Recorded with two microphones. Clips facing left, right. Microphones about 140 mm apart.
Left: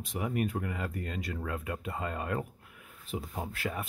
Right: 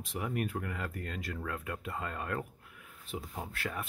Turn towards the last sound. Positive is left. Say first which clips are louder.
# left 3 dB
turn(degrees=0)  # may be behind; listen again after turning